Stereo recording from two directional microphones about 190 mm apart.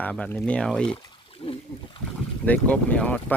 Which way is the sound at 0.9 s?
30° left (ahead or behind).